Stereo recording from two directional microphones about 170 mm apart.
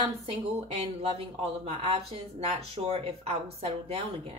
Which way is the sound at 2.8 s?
35° right (ahead or behind).